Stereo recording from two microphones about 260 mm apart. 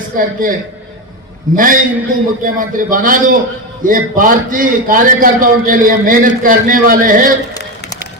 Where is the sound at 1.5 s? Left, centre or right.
Right.